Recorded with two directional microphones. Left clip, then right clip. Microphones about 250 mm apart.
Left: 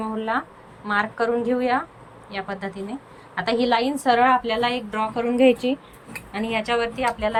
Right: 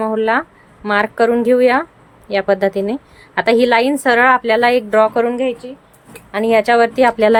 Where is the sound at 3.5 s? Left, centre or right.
Centre.